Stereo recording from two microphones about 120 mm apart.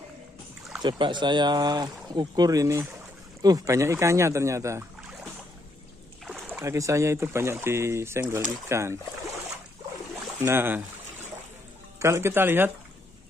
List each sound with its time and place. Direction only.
0.8 s speech: 40° right (ahead or behind); by 5.3 s 25° right (ahead or behind)
6.2 s rowboat: 10° right (ahead or behind)
6.6 s speech: 25° right (ahead or behind)
10.4 s speech: 20° right (ahead or behind)
12.0 s speech: 20° right (ahead or behind)